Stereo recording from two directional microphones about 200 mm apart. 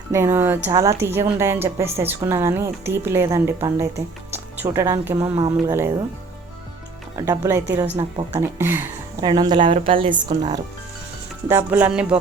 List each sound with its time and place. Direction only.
0.1 s a woman's voice: 10° right (ahead or behind)
7.3 s a woman's voice: 15° right (ahead or behind)
9.6 s speech: 40° right (ahead or behind)
9.9 s a woman's voice: 25° right (ahead or behind)
11.4 s a woman's voice: 10° right (ahead or behind)